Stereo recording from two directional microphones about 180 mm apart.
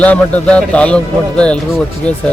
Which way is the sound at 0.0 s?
10° left (ahead or behind).